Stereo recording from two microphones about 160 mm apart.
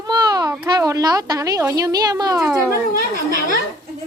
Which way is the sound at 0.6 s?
20° right (ahead or behind).